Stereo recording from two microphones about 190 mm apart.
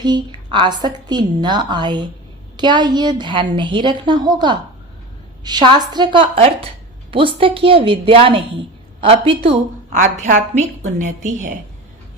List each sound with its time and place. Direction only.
0.0 s a woman's voice: 25° right (ahead or behind); by 11.5 s 40° right (ahead or behind)